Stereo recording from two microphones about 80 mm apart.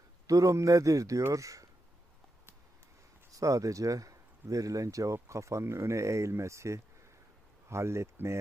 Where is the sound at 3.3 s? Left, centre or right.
Right.